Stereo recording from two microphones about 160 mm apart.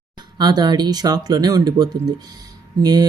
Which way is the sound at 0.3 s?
25° right (ahead or behind).